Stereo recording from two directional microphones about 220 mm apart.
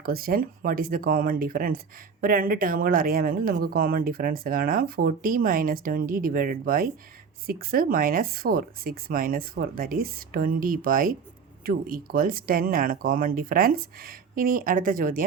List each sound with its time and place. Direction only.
0.0 s speech: 40° right (ahead or behind)